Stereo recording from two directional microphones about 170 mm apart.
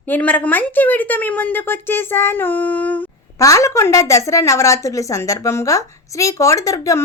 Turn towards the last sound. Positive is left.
turn(degrees=20)  # may be behind; listen again after turning